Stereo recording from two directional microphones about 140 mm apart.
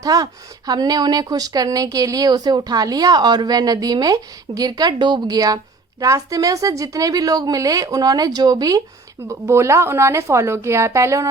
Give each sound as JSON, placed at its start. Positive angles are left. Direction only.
{"t": 0.0, "sound": "speech", "side_deg": -25}